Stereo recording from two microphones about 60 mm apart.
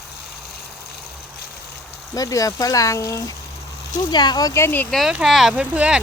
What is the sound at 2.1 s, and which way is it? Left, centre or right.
Speech, left.